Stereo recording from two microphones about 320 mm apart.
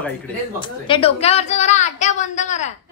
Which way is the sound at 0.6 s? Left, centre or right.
Centre.